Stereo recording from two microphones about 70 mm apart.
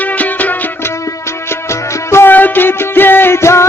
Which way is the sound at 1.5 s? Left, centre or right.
Left.